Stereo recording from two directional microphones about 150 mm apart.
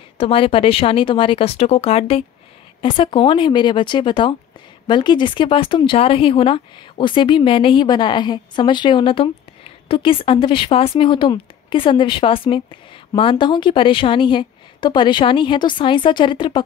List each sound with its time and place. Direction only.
0.2 s speech: 35° left (ahead or behind)